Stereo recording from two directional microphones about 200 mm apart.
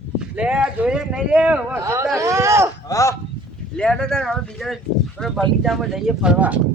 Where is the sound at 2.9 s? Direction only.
15° left (ahead or behind).